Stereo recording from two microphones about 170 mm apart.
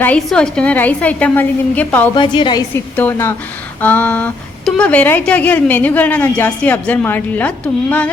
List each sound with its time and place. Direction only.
0.0 s a woman's voice: 5° left (ahead or behind)
2.1 s a woman's voice: 30° left (ahead or behind)
2.9 s a woman's voice: 10° left (ahead or behind)